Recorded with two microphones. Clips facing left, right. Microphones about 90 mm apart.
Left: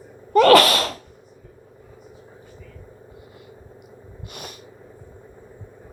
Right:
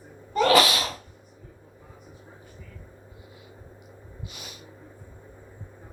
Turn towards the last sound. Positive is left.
turn(degrees=55)  # may be behind; listen again after turning